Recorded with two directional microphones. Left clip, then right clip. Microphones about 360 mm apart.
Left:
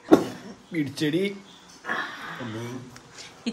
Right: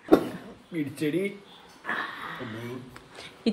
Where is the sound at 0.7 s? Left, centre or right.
Left.